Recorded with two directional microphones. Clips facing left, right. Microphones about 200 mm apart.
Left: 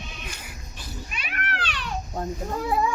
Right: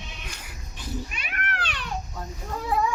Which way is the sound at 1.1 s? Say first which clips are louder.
Left 1 dB; 50° right (ahead or behind).